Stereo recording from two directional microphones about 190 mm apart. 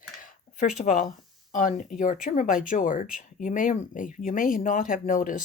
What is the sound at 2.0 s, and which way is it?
Speech, 45° left (ahead or behind).